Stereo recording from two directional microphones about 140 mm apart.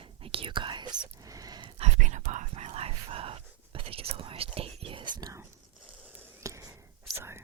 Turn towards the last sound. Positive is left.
turn(degrees=-20)  # may be behind; listen again after turning